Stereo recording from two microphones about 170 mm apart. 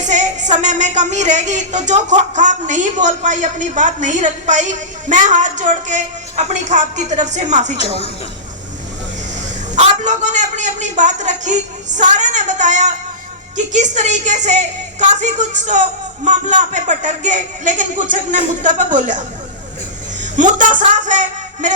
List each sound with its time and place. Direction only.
0.1 s a woman's voice: 45° right (ahead or behind)
7.8 s a woman's voice: 35° left (ahead or behind)
9.7 s a man's voice: 45° right (ahead or behind)
20.3 s speech: 50° right (ahead or behind)